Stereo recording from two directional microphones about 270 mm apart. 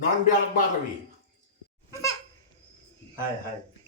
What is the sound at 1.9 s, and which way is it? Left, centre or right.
Baby laughter, centre.